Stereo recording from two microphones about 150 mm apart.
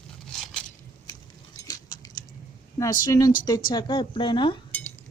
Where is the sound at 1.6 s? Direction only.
25° left (ahead or behind).